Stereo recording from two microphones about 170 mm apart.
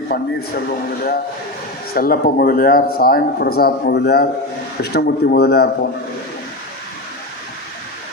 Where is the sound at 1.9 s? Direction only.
60° left (ahead or behind).